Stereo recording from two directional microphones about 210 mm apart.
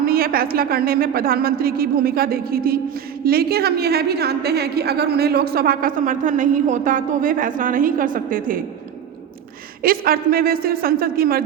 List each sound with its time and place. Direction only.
0.0 s a woman's voice: 45° right (ahead or behind)
9.8 s a woman's voice: 45° right (ahead or behind)